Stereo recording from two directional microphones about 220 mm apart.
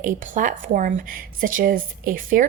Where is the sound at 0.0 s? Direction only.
35° right (ahead or behind).